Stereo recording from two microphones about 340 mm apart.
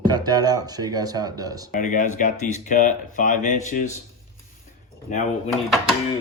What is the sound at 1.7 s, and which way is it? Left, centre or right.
Speech, left.